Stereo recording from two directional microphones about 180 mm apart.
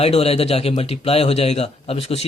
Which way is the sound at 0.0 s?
35° left (ahead or behind).